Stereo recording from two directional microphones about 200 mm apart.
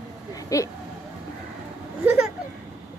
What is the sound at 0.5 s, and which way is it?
Speech, 15° left (ahead or behind).